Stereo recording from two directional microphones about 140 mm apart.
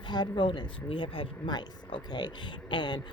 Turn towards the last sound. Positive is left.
turn(degrees=35)  # may be behind; listen again after turning